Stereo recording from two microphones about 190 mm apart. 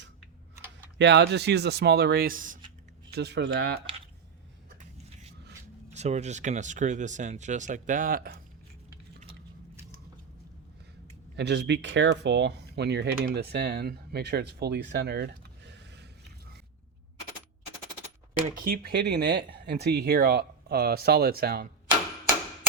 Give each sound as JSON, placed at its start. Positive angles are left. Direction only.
{"t": 0.9, "sound": "speech", "side_deg": -65}
{"t": 3.1, "sound": "speech", "side_deg": -60}
{"t": 5.9, "sound": "speech", "side_deg": -35}
{"t": 11.3, "sound": "speech", "side_deg": -60}
{"t": 18.4, "sound": "speech", "side_deg": -45}